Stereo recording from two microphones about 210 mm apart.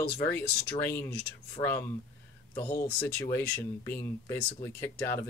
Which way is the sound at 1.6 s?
10° left (ahead or behind).